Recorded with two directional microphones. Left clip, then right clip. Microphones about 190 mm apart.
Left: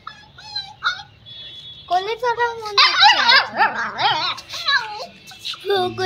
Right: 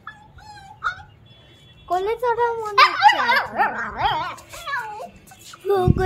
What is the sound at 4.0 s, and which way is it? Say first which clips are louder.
Speech: left 3 dB; 10° right (ahead or behind).